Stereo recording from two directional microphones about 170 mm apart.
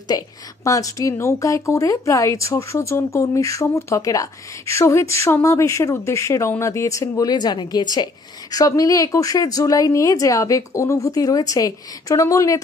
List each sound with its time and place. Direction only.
0.1 s a woman's voice: 20° left (ahead or behind)